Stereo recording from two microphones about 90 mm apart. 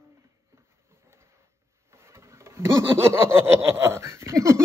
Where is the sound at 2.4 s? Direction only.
30° right (ahead or behind).